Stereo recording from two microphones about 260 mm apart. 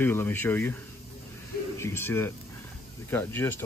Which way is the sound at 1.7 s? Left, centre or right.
Centre.